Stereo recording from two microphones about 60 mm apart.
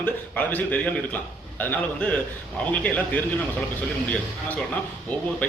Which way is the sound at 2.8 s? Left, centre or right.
Left.